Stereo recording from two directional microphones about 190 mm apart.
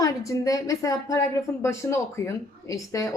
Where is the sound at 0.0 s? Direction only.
15° left (ahead or behind).